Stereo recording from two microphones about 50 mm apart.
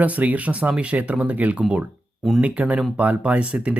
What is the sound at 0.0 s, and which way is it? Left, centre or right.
Speech, right.